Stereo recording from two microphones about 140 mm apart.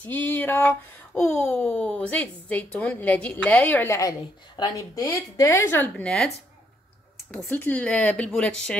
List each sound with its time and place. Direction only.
0.0 s a woman's voice: 15° left (ahead or behind)
5.9 s speech: 5° left (ahead or behind)
7.4 s speech: 15° left (ahead or behind)